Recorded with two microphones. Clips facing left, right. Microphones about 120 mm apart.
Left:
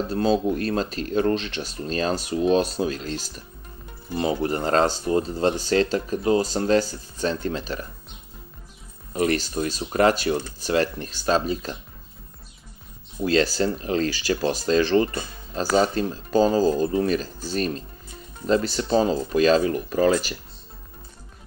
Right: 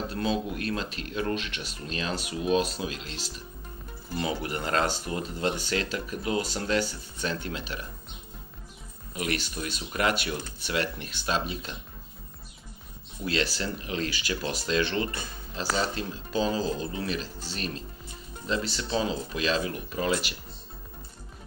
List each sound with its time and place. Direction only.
0.1 s speech: 35° left (ahead or behind)
4.1 s speech: 35° left (ahead or behind)
9.1 s speech: 35° left (ahead or behind)
13.2 s speech: 40° left (ahead or behind)